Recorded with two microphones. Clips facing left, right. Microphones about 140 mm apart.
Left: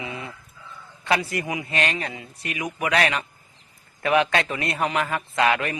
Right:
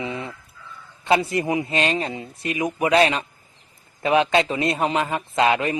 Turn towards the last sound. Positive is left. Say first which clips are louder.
# right 3 dB
turn(degrees=-25)  # may be behind; listen again after turning